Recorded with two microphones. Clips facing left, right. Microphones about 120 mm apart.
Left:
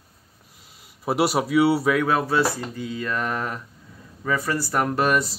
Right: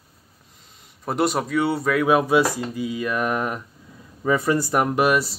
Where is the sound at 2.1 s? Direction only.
15° right (ahead or behind).